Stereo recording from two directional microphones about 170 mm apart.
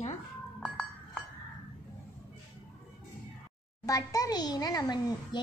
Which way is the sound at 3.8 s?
20° left (ahead or behind).